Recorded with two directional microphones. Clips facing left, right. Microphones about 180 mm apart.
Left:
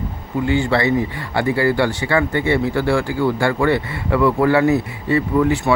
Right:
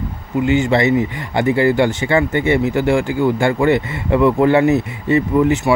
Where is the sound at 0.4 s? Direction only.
20° right (ahead or behind).